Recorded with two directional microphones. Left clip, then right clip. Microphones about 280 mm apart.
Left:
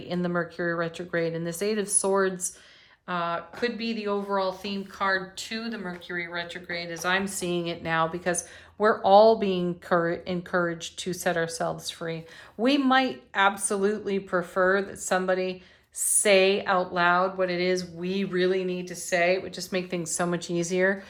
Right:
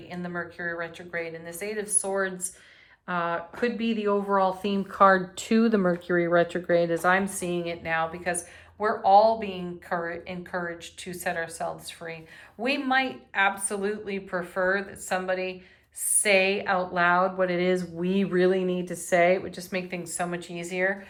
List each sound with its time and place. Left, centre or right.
0.2 s a woman's voice: centre
3.1 s a woman's voice: centre